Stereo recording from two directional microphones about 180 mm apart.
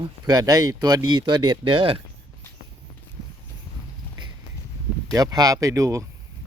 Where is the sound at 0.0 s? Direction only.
20° right (ahead or behind).